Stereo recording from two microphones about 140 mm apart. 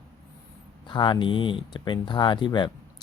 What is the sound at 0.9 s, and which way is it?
Speech, 35° left (ahead or behind).